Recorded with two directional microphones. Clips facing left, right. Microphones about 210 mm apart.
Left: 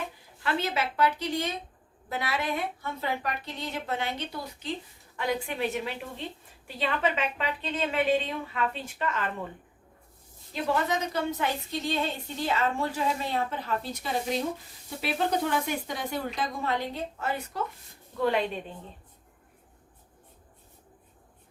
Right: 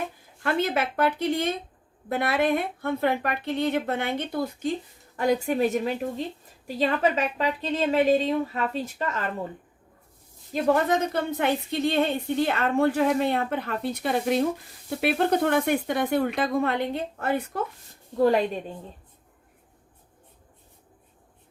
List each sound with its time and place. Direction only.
0.4 s a woman's voice: 50° right (ahead or behind)
10.5 s a woman's voice: 55° right (ahead or behind)
18.2 s a woman's voice: 40° right (ahead or behind)